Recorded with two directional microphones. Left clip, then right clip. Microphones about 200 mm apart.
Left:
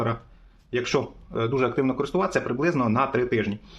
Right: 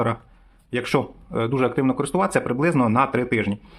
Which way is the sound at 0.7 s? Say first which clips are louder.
Right 2 dB; 30° right (ahead or behind).